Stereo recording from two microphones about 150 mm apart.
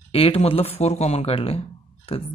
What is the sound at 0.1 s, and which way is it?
Speech, 40° left (ahead or behind).